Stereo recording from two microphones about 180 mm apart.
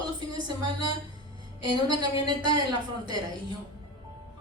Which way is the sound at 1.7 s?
25° right (ahead or behind).